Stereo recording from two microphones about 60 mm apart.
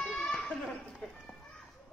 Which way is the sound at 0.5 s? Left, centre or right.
Centre.